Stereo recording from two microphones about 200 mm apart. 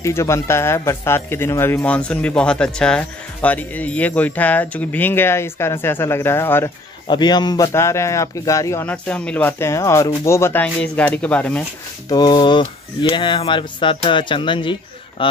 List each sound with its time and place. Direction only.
0.0 s speech: 15° left (ahead or behind)
12.1 s speech: 20° left (ahead or behind)